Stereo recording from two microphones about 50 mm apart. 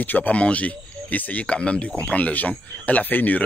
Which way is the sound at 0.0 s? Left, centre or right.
Left.